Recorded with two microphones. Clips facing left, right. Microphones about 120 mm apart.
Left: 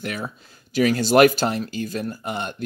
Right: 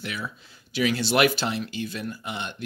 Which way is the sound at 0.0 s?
45° left (ahead or behind).